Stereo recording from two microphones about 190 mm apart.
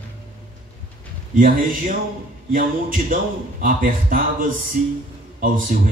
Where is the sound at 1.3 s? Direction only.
45° right (ahead or behind).